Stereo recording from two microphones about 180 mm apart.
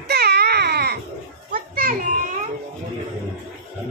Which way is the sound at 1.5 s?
55° right (ahead or behind).